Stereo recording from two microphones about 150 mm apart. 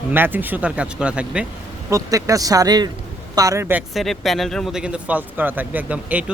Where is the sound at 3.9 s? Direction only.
Centre (ahead or behind).